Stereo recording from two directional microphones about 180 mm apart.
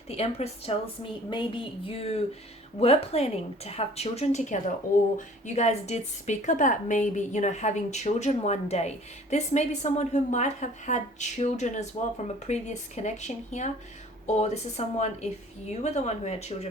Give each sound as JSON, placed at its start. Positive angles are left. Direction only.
{"t": 0.1, "sound": "a woman's voice", "side_deg": 35}